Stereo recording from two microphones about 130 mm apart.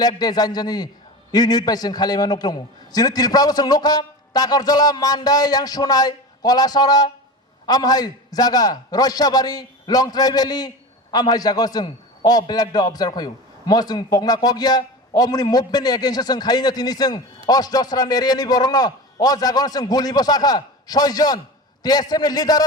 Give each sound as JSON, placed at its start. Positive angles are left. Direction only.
{"t": 0.2, "sound": "a man's voice", "side_deg": 30}